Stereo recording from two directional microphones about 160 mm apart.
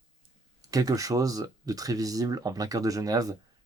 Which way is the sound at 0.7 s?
20° right (ahead or behind).